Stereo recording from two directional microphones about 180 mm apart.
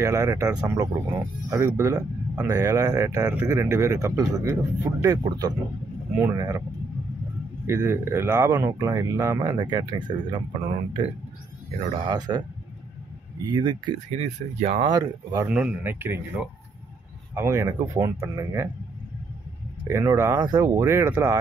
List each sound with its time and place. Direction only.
0.0 s speech: 15° right (ahead or behind)
7.6 s speech: 15° right (ahead or behind)
11.9 s speech: 25° right (ahead or behind)
14.2 s speech: 35° right (ahead or behind)
14.9 s speech: 20° right (ahead or behind)
15.4 s speech: 5° right (ahead or behind)
19.9 s speech: 15° right (ahead or behind)